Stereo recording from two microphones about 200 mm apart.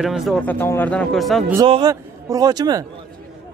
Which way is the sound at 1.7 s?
20° right (ahead or behind).